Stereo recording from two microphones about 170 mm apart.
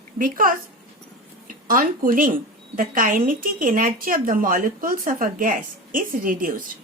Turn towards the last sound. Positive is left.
turn(degrees=-55)  # may be behind; listen again after turning